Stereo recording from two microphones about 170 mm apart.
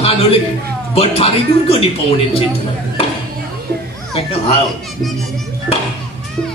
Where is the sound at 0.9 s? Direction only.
35° left (ahead or behind).